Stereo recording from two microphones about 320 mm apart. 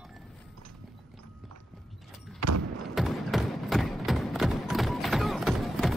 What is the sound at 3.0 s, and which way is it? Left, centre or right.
Music, centre.